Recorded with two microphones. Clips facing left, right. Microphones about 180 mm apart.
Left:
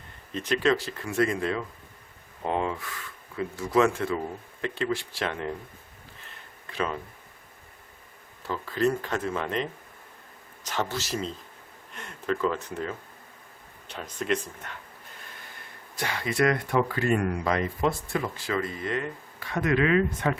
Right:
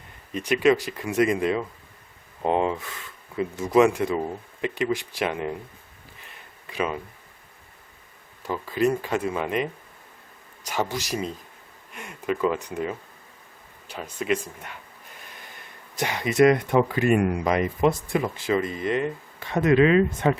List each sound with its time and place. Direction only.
0.3 s speech: 10° right (ahead or behind)
6.7 s speech: 10° right (ahead or behind)
8.4 s speech: 10° right (ahead or behind)
10.7 s speech: 10° right (ahead or behind)
16.0 s speech: 20° right (ahead or behind)